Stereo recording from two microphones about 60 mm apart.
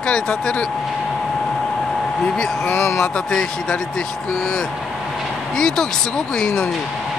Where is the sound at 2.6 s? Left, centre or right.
Left.